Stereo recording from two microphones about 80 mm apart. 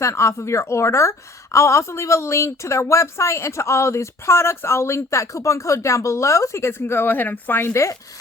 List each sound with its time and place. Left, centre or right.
0.0 s a woman's voice: left